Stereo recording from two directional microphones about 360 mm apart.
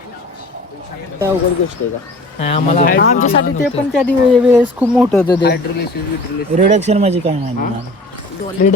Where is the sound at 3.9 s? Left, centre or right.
Centre.